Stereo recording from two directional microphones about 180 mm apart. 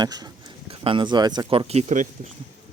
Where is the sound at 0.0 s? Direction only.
20° right (ahead or behind); by 2.3 s 40° right (ahead or behind).